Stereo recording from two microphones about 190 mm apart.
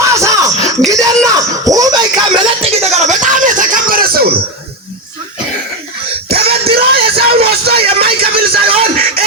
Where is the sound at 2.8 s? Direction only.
35° right (ahead or behind); by 4.3 s 50° right (ahead or behind).